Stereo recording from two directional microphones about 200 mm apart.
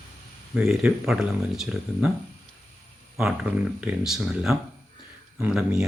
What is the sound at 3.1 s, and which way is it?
Speech, 5° right (ahead or behind).